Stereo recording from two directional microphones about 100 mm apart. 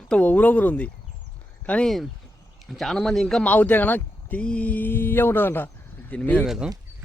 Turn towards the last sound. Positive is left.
turn(degrees=-5)  # may be behind; listen again after turning